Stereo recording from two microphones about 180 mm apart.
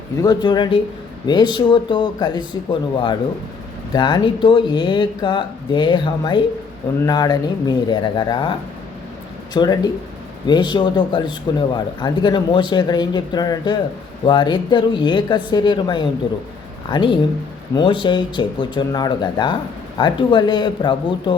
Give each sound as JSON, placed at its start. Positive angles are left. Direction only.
{"t": 0.2, "sound": "a man's voice", "side_deg": 25}